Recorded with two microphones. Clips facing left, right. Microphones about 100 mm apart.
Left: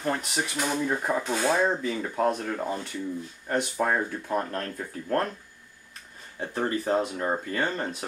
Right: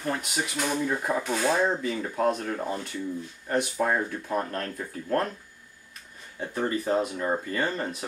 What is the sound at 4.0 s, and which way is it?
Speech, 10° left (ahead or behind).